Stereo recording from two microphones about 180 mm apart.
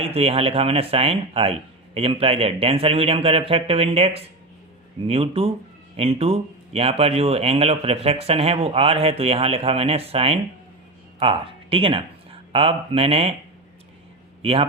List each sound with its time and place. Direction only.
0.0 s speech: 35° right (ahead or behind)